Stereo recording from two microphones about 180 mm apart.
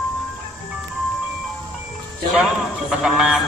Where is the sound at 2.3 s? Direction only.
5° right (ahead or behind).